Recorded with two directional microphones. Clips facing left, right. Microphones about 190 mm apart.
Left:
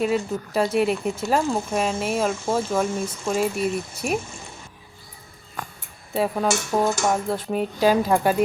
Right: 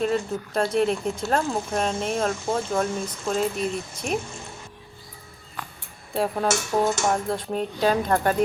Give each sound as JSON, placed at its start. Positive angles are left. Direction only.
{"t": 0.0, "sound": "speech", "side_deg": 5}
{"t": 5.6, "sound": "a sound", "side_deg": 45}
{"t": 6.1, "sound": "speech", "side_deg": 0}